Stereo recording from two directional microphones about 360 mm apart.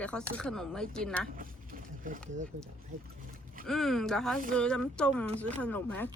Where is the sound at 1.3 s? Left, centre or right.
Right.